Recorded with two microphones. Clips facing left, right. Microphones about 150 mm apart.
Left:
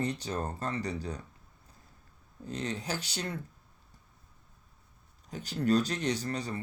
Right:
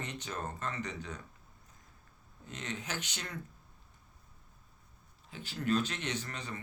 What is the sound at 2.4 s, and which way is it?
Speech, 35° left (ahead or behind).